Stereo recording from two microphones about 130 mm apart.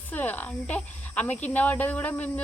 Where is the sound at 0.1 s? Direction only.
15° left (ahead or behind).